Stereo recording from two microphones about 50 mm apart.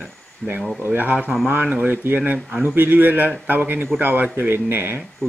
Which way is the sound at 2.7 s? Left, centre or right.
Right.